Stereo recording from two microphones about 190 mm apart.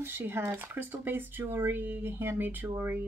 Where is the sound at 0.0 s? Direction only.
10° right (ahead or behind).